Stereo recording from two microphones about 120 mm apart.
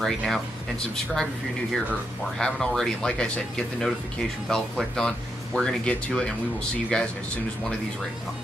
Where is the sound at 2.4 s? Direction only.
5° left (ahead or behind).